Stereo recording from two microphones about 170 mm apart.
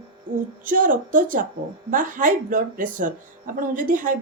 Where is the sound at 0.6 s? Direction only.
50° right (ahead or behind).